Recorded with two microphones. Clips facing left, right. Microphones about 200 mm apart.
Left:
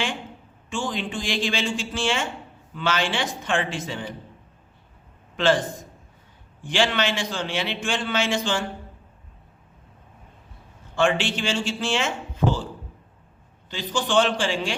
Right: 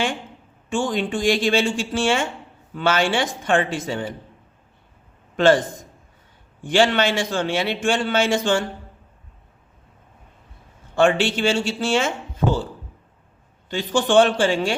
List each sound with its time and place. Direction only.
0.7 s a man's voice: 45° right (ahead or behind)
6.7 s a man's voice: 45° right (ahead or behind)
10.9 s a man's voice: 45° right (ahead or behind)
13.7 s a man's voice: 50° right (ahead or behind)